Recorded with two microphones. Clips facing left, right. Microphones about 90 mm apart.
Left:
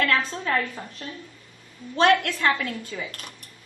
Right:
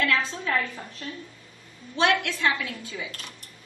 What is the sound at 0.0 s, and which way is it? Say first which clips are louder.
Speech: left 2 dB; 45° left (ahead or behind).